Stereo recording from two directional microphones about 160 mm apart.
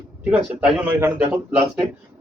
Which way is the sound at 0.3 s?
5° right (ahead or behind).